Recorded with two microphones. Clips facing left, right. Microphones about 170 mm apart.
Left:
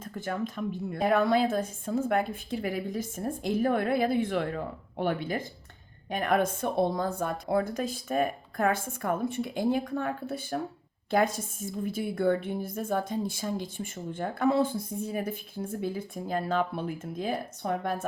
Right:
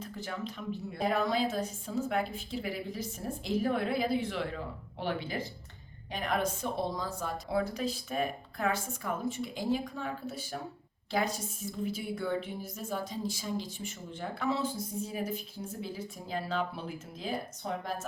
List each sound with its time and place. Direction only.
0.0 s a woman's voice: 50° left (ahead or behind)